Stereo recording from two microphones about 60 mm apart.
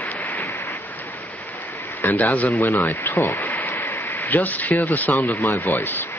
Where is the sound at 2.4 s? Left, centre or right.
Left.